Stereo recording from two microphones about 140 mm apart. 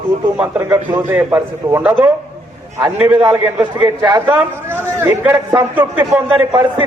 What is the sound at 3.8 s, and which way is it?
Speech, 30° right (ahead or behind).